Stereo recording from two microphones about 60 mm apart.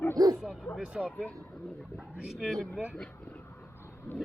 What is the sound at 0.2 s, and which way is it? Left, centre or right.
Bow-wow, right.